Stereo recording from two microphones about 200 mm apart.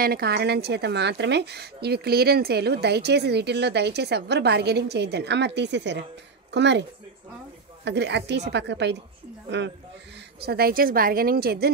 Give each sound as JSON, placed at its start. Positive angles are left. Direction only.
{"t": 0.0, "sound": "a woman's voice", "side_deg": -50}
{"t": 7.8, "sound": "a woman's voice", "side_deg": -60}
{"t": 10.4, "sound": "speech", "side_deg": -50}